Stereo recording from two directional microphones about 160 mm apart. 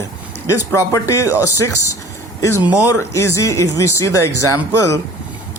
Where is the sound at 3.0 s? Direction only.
20° left (ahead or behind).